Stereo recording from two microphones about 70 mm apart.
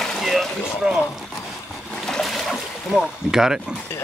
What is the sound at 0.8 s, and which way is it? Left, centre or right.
Speech, centre.